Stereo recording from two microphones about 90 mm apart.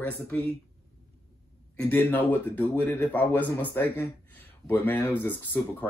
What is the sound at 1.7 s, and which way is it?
Speech, 20° left (ahead or behind).